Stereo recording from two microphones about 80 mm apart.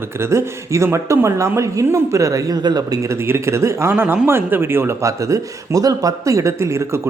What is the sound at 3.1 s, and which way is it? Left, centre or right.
Speech, right.